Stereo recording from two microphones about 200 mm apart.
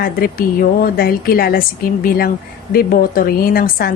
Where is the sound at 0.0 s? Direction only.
45° left (ahead or behind).